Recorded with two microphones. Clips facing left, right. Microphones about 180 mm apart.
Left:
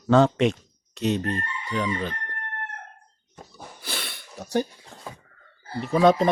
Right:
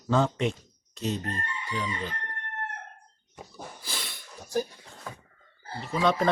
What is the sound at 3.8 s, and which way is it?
Sneeze, 65° left (ahead or behind).